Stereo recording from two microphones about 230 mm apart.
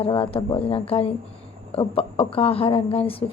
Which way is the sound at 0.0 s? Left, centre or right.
Left.